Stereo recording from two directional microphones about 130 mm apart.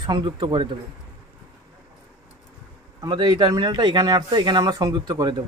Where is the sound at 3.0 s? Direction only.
35° right (ahead or behind).